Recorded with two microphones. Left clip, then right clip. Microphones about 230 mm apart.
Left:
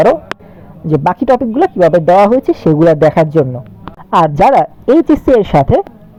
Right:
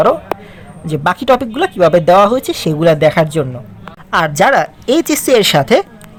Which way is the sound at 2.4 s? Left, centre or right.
Centre.